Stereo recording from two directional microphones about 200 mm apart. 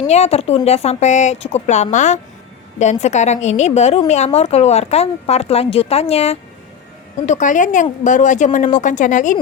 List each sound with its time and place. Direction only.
0.1 s a woman's voice: 30° left (ahead or behind)